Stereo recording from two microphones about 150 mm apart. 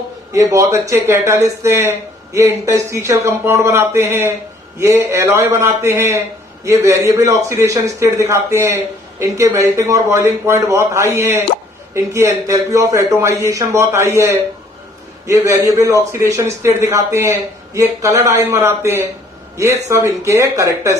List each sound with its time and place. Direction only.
0.3 s a man's voice: 20° right (ahead or behind)